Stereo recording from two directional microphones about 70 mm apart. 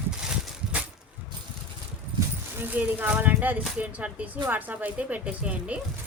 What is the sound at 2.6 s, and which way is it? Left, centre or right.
Speech, right.